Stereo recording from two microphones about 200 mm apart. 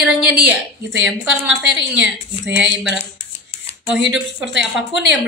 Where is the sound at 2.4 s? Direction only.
65° right (ahead or behind).